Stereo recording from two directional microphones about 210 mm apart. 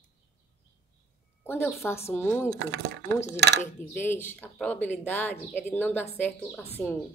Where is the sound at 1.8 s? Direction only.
10° left (ahead or behind).